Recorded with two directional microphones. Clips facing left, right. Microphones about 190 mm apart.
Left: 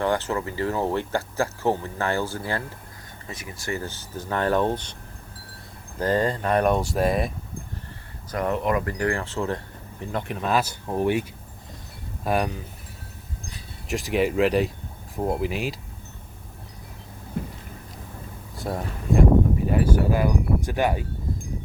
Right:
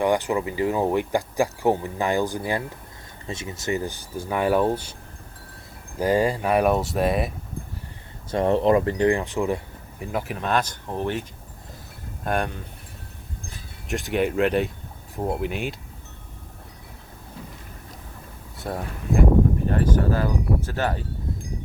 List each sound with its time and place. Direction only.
0.0 s speech: 15° right (ahead or behind)
6.0 s speech: 10° right (ahead or behind)
8.3 s speech: 30° right (ahead or behind); by 12.6 s 5° left (ahead or behind)
13.8 s speech: centre (ahead or behind)
17.4 s a sound: 55° left (ahead or behind)
18.5 s speech: centre (ahead or behind)